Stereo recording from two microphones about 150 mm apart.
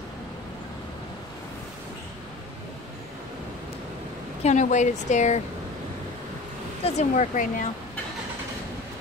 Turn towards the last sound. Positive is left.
turn(degrees=55)  # may be behind; listen again after turning